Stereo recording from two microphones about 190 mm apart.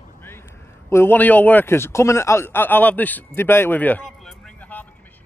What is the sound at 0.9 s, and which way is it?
A man's voice, 10° left (ahead or behind).